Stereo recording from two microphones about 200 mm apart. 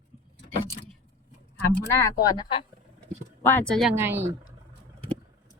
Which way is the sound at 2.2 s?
20° left (ahead or behind).